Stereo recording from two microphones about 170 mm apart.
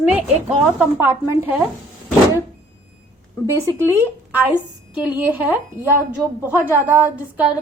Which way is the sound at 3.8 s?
15° right (ahead or behind).